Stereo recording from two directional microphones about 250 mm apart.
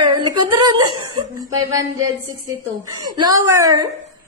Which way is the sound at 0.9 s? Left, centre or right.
Right.